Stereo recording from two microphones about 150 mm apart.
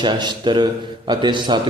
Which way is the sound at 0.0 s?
30° right (ahead or behind).